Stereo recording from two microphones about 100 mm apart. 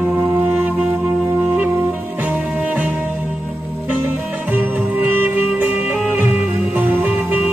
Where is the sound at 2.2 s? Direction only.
15° right (ahead or behind).